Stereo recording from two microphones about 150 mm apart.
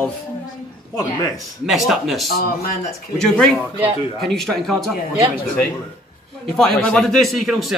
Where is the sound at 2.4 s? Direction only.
85° left.